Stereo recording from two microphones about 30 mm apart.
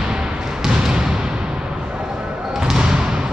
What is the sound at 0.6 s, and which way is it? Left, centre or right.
Basketball bounce, right.